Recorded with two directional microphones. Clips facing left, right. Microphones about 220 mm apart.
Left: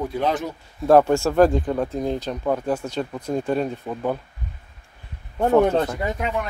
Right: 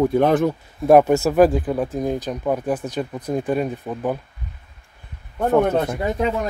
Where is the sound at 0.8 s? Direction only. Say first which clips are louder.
Right 2 dB; 15° right (ahead or behind).